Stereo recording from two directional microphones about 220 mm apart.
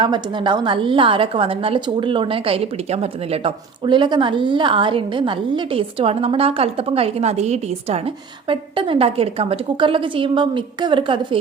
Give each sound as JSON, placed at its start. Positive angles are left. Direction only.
{"t": 0.0, "sound": "a woman's voice", "side_deg": -20}